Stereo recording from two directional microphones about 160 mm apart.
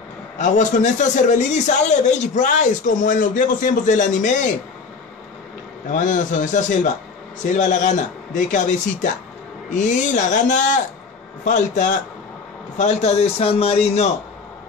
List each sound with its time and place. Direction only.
0.4 s a man's voice: 50° left (ahead or behind)
5.9 s a man's voice: 50° left (ahead or behind)